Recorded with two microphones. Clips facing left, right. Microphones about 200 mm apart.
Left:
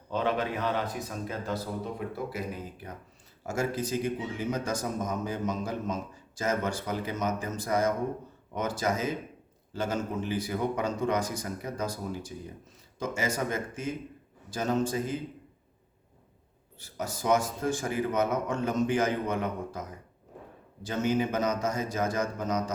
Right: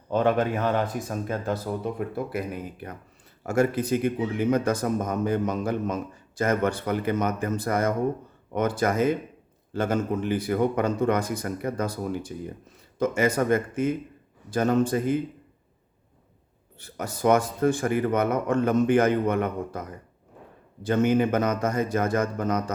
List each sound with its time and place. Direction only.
0.1 s speech: 50° right (ahead or behind)
3.4 s speech: 60° right (ahead or behind)
16.7 s speech: 60° right (ahead or behind)
20.8 s speech: 55° right (ahead or behind)